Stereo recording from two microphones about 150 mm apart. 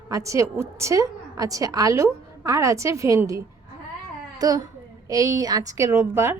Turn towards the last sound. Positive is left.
turn(degrees=-15)  # may be behind; listen again after turning